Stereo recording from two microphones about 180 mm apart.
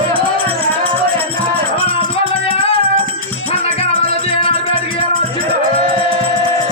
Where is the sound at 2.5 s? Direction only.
30° left (ahead or behind).